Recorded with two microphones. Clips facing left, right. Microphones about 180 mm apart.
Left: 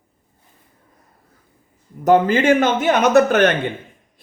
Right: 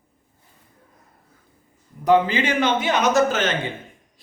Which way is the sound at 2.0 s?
45° left (ahead or behind).